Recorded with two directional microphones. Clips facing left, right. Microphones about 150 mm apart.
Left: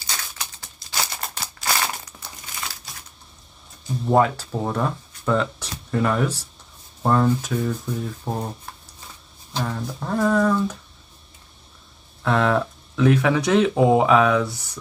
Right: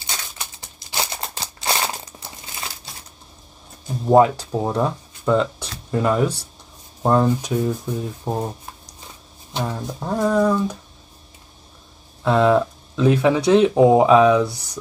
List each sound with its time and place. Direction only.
0.0 s a sound: 20° right (ahead or behind)
4.2 s speech: 15° right (ahead or behind)
9.5 s speech: 20° right (ahead or behind)
12.2 s speech: 15° right (ahead or behind)